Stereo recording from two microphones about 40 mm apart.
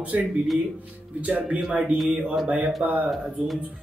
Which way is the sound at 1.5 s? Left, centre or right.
Right.